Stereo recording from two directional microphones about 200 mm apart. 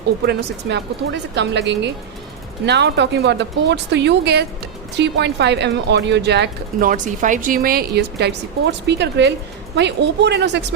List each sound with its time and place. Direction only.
0.3 s speech: 60° right (ahead or behind)
6.7 s a woman's voice: 40° right (ahead or behind); by 10.6 s 60° right (ahead or behind)